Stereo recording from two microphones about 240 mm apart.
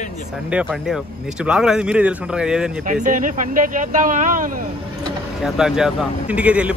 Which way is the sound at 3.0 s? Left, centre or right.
Right.